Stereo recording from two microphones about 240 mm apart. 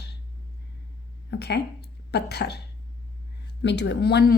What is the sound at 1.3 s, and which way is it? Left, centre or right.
Speech, left.